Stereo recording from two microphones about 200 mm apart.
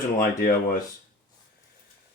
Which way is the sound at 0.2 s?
45° left (ahead or behind).